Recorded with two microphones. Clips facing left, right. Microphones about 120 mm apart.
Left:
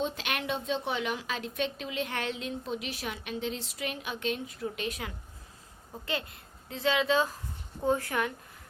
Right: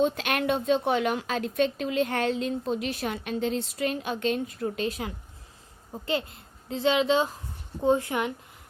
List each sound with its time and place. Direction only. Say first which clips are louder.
0.0 s a woman's voice: right 8 dB; 55° right (ahead or behind); by 8.3 s 20° right (ahead or behind)